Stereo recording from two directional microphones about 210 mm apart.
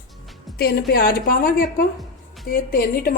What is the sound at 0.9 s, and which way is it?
A woman's voice, 45° left (ahead or behind).